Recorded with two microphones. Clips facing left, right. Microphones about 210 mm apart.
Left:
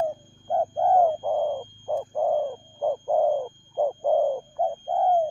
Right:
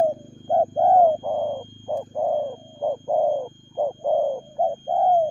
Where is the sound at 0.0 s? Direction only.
40° right (ahead or behind).